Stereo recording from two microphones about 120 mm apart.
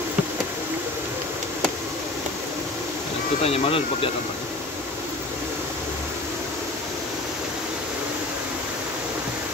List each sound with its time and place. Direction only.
3.4 s speech: 55° left (ahead or behind)